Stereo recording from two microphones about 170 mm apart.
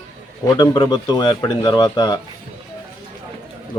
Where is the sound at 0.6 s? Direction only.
25° left (ahead or behind).